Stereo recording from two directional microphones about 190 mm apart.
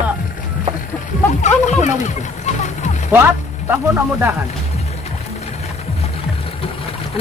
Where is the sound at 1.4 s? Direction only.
40° left (ahead or behind).